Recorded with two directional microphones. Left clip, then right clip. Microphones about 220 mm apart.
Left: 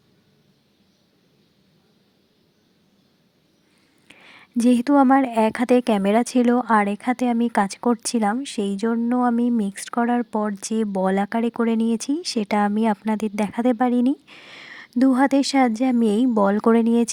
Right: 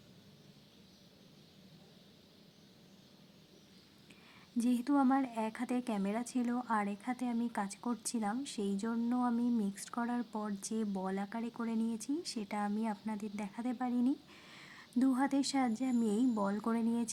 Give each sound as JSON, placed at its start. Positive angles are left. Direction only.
{"t": 4.1, "sound": "speech", "side_deg": 40}